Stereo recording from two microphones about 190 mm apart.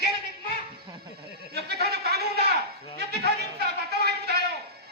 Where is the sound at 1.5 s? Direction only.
55° right (ahead or behind).